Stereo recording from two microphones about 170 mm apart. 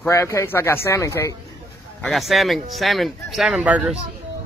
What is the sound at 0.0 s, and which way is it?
Speech, 15° left (ahead or behind).